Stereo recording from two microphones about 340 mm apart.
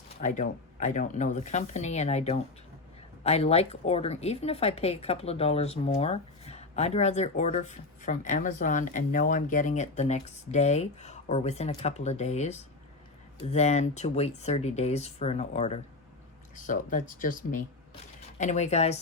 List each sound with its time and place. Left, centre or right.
0.2 s a woman's voice: left